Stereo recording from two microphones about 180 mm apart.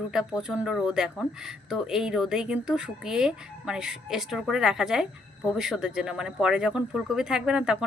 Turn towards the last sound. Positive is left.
turn(degrees=-5)  # may be behind; listen again after turning